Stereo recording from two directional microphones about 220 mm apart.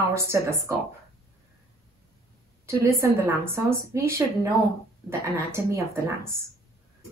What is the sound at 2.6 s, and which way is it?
A woman's voice, 10° right (ahead or behind).